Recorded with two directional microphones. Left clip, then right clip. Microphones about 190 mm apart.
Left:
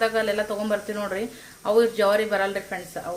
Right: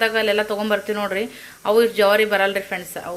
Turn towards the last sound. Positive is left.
turn(degrees=-5)  # may be behind; listen again after turning